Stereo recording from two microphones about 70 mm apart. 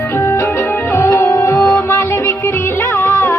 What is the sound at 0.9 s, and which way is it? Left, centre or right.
Music, left.